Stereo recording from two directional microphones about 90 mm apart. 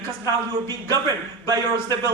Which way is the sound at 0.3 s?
45° right (ahead or behind).